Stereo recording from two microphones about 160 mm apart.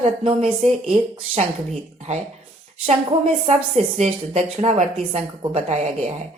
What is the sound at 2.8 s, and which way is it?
A woman's voice, 35° right (ahead or behind).